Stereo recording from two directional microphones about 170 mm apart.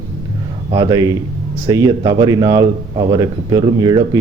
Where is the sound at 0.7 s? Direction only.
20° right (ahead or behind).